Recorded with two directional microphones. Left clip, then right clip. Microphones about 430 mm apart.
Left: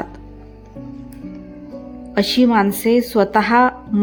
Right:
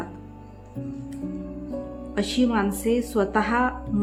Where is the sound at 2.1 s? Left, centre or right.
Centre.